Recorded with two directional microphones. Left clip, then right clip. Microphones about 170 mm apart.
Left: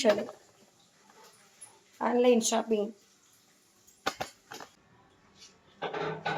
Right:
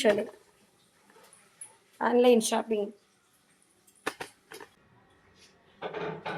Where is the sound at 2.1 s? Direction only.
65° right (ahead or behind).